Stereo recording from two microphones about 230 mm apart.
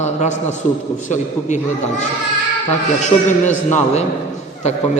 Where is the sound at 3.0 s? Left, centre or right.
Left.